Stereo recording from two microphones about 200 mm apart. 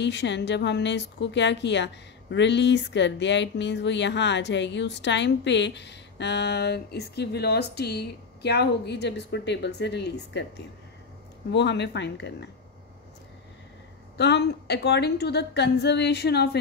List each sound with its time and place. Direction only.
0.0 s speech: 60° left (ahead or behind)
11.5 s speech: 60° left (ahead or behind)
14.1 s speech: 60° left (ahead or behind)